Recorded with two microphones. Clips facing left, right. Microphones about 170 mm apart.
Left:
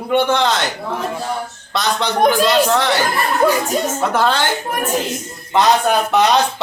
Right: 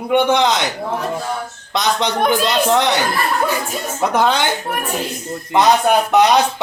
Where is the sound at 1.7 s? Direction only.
20° right (ahead or behind).